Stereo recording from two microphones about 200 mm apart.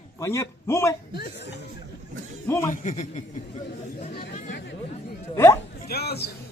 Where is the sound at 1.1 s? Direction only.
50° left (ahead or behind).